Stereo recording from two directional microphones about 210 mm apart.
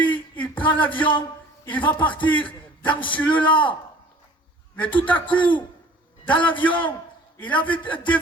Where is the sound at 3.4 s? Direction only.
25° left (ahead or behind).